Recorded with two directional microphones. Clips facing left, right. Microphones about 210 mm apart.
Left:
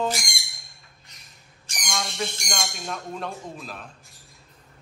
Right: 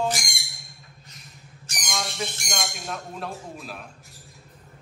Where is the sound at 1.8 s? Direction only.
5° right (ahead or behind).